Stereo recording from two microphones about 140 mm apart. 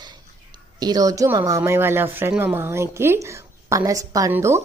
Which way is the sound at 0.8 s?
30° right (ahead or behind).